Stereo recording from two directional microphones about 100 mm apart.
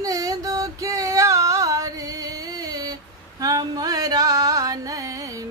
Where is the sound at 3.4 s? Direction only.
40° right (ahead or behind).